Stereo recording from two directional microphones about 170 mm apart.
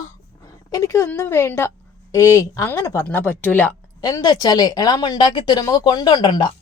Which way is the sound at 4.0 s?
20° left (ahead or behind).